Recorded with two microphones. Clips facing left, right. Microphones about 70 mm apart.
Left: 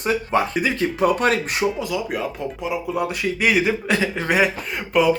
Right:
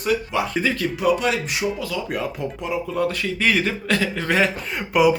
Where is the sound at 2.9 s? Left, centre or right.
Centre.